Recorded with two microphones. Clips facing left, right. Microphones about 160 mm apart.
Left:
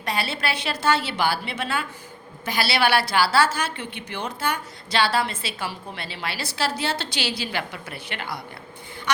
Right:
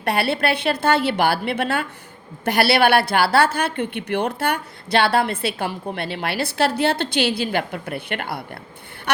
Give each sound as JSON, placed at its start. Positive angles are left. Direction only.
{"t": 0.0, "sound": "a woman's voice", "side_deg": -60}